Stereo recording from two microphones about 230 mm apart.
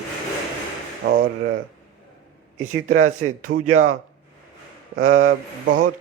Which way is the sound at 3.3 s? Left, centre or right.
Right.